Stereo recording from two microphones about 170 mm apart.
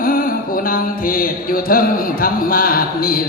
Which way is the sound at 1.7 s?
60° left (ahead or behind).